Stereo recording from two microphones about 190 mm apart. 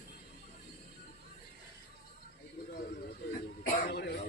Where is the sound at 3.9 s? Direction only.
60° left (ahead or behind).